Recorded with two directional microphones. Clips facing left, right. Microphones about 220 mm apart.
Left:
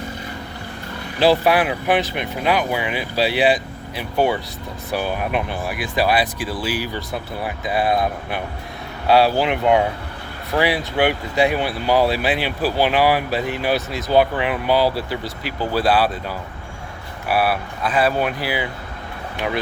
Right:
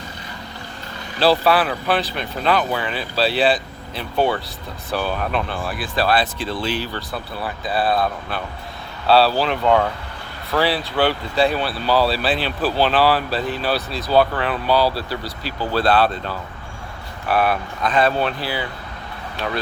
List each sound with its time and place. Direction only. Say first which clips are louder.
1.2 s speech: left 1 dB; 15° left (ahead or behind)